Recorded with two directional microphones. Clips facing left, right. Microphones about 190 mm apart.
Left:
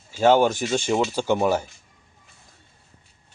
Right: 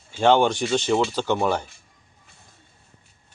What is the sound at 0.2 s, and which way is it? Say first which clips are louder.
Speech: left 1 dB; 5° left (ahead or behind).